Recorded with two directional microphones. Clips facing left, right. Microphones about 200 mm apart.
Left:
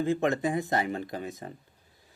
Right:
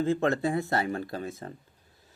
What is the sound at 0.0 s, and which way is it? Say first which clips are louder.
Speech: right 1 dB; 15° left (ahead or behind).